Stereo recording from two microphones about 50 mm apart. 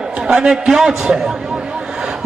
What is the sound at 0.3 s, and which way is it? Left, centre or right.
Speech, centre.